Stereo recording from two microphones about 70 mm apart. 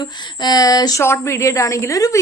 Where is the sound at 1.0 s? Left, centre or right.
Left.